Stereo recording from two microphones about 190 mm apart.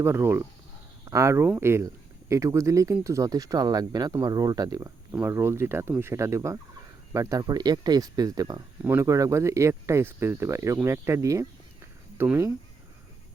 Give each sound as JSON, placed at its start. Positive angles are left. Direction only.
{"t": 0.0, "sound": "speech", "side_deg": -15}